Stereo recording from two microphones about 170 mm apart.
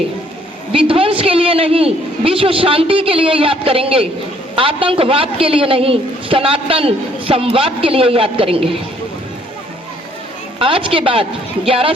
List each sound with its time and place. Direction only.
0.7 s a man's voice: 35° right (ahead or behind)
10.6 s a man's voice: 30° right (ahead or behind)